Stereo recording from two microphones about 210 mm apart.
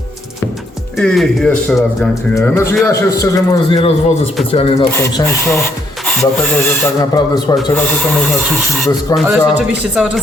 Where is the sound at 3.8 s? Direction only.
30° left (ahead or behind).